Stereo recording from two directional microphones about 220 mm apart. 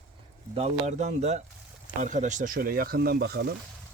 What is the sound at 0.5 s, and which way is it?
Speech, 30° right (ahead or behind).